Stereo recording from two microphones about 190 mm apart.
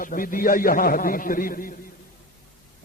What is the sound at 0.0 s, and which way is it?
A man's voice, 45° left (ahead or behind).